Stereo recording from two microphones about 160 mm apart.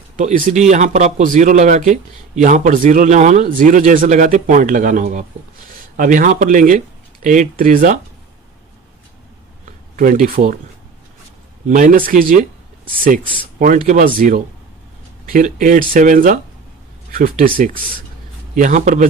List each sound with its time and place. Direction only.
0.2 s speech: 55° right (ahead or behind)
9.9 s speech: 55° right (ahead or behind)
11.7 s speech: 55° right (ahead or behind)
13.8 s speech: 55° right (ahead or behind)
15.3 s speech: 50° right (ahead or behind)
18.5 s speech: 50° right (ahead or behind)